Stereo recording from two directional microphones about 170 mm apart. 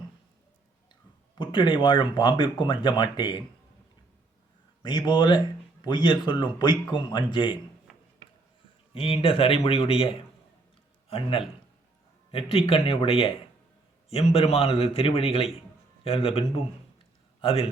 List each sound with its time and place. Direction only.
1.4 s speech: 30° left (ahead or behind)
4.8 s speech: 25° left (ahead or behind)
9.0 s a man's voice: 30° left (ahead or behind)
17.4 s a man's voice: 35° left (ahead or behind)